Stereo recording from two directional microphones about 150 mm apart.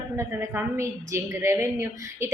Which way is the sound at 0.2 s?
15° right (ahead or behind).